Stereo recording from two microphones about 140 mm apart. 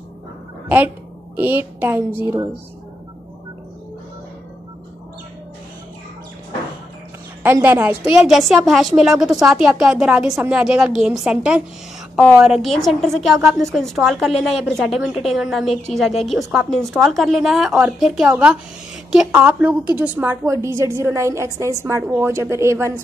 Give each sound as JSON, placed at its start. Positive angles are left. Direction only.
{"t": 0.7, "sound": "a woman's voice", "side_deg": -10}
{"t": 7.4, "sound": "a woman's voice", "side_deg": -15}
{"t": 20.2, "sound": "a woman's voice", "side_deg": -25}